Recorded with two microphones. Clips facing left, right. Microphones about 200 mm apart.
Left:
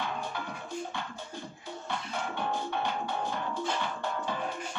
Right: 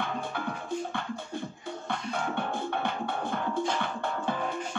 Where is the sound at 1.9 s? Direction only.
55° right (ahead or behind).